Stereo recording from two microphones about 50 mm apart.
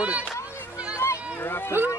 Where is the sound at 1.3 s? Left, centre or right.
Left.